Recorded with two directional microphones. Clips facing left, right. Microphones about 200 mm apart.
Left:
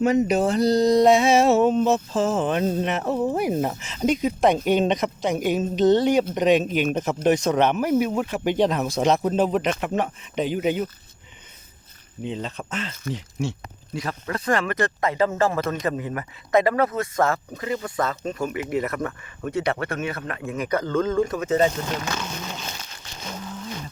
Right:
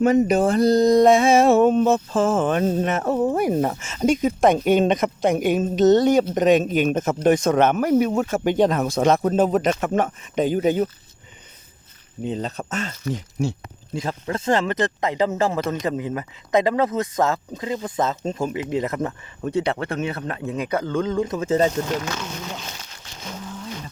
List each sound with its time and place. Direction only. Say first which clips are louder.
0.0 s speech: right 3 dB; 50° right (ahead or behind)
12.2 s speech: right 3 dB; 40° right (ahead or behind)
13.9 s speech: right 3 dB; 25° right (ahead or behind)
20.7 s speech: left 1 dB; 10° right (ahead or behind); by 21.7 s 30° right (ahead or behind)